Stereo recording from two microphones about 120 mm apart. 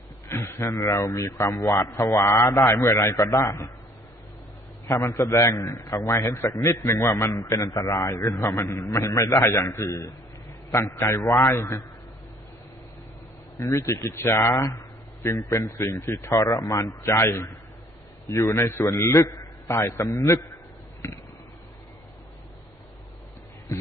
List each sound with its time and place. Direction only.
0.3 s a man's voice: 20° left (ahead or behind)
4.8 s a man's voice: 30° left (ahead or behind)
13.6 s a man's voice: 25° left (ahead or behind)
23.7 s a sound: 25° left (ahead or behind)